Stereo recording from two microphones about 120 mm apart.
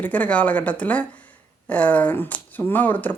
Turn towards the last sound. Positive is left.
turn(degrees=15)  # may be behind; listen again after turning